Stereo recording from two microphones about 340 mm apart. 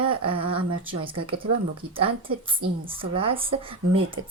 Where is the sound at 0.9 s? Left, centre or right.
Centre.